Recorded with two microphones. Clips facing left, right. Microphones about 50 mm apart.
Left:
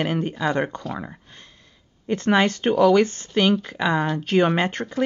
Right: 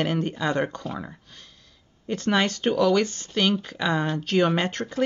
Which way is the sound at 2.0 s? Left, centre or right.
Left.